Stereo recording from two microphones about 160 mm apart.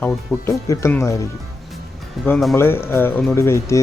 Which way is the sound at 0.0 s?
15° left (ahead or behind).